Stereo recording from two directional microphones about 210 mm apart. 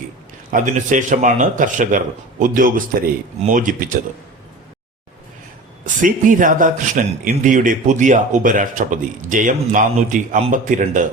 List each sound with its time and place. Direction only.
0.5 s a man's voice: 35° right (ahead or behind)
5.8 s a man's voice: 40° right (ahead or behind)